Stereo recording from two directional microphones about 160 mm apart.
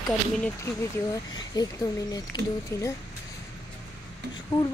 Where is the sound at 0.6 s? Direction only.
20° left (ahead or behind).